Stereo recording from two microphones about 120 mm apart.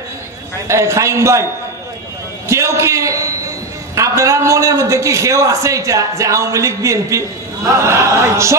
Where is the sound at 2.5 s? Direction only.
25° right (ahead or behind).